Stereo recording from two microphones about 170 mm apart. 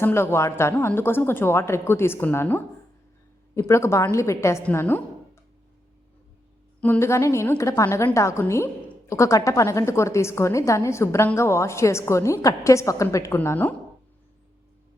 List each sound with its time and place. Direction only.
0.0 s a woman's voice: 15° left (ahead or behind)
6.8 s a woman's voice: 15° left (ahead or behind)